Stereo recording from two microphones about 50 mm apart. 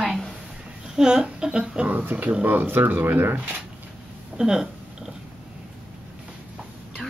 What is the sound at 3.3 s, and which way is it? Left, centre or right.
Speech, right.